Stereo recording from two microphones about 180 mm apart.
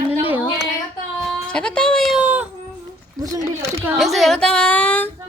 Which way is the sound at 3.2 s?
20° right (ahead or behind).